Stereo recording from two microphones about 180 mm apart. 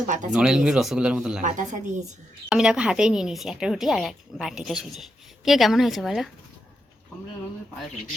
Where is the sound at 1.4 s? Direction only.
45° right (ahead or behind).